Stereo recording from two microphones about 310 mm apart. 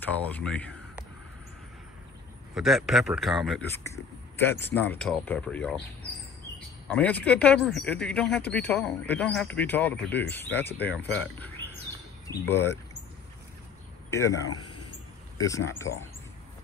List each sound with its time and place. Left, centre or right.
0.1 s speech: centre
2.5 s speech: centre
4.7 s speech: centre
14.1 s speech: centre
14.5 s a sound: left
15.3 s speech: centre